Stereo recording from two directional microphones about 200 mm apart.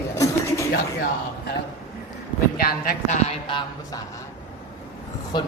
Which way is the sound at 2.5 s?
50° left (ahead or behind).